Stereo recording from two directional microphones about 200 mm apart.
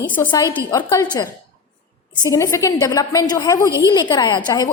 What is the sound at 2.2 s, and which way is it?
A woman's voice, 15° left (ahead or behind).